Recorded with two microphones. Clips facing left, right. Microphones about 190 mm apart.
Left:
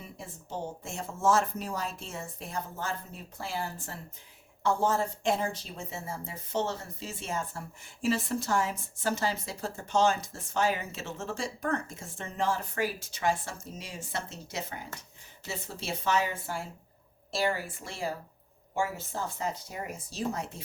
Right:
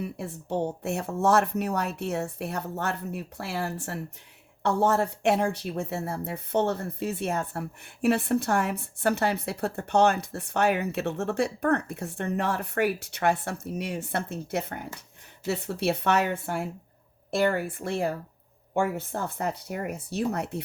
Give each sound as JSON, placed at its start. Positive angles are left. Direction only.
{"t": 0.0, "sound": "speech", "side_deg": -65}